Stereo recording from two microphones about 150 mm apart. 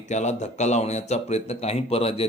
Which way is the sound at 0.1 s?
50° left (ahead or behind).